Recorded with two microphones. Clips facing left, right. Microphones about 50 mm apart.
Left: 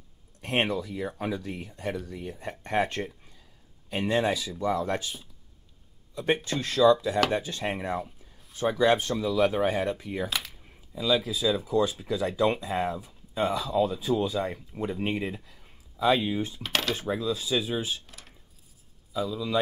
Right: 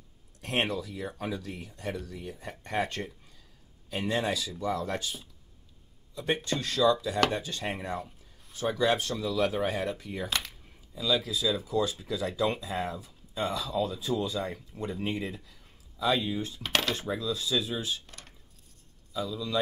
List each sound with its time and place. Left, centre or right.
0.4 s speech: centre
16.6 s speech: centre